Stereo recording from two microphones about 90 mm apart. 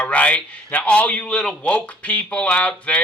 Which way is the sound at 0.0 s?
15° left (ahead or behind).